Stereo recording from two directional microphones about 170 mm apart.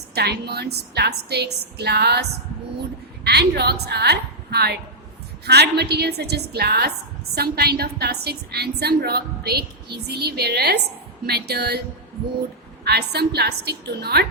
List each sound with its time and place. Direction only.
0.1 s a woman's voice: 70° right (ahead or behind)
3.2 s a woman's voice: 70° right (ahead or behind)
12.8 s a woman's voice: 70° right (ahead or behind)